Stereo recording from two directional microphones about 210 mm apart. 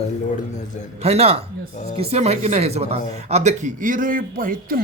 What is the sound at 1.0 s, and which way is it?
A man's voice, 30° right (ahead or behind).